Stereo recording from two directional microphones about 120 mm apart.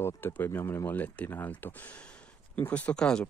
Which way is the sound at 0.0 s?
20° left (ahead or behind).